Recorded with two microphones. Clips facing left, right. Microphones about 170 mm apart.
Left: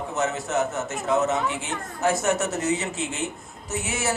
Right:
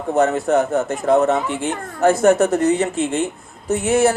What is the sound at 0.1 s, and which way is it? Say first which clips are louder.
Speech: right 11 dB; 55° right (ahead or behind).